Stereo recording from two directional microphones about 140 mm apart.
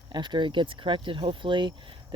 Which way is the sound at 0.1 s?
35° right (ahead or behind).